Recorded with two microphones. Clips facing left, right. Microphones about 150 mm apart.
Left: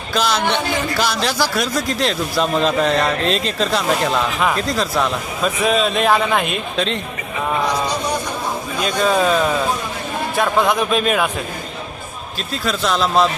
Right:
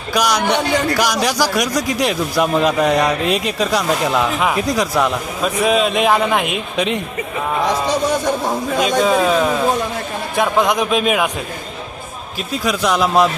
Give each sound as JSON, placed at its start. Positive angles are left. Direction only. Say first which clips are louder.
{"t": 0.1, "sound": "a man's voice", "louder": "right 2 dB", "side_deg": -15}
{"t": 8.7, "sound": "a man's voice", "louder": "right 6 dB", "side_deg": -90}
{"t": 9.0, "sound": "a man's voice", "louder": "right 1 dB", "side_deg": -5}
{"t": 12.4, "sound": "a man's voice", "louder": "right 3 dB", "side_deg": -10}